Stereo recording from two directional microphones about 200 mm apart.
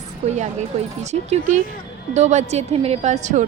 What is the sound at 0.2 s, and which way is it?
A woman's voice, 35° right (ahead or behind).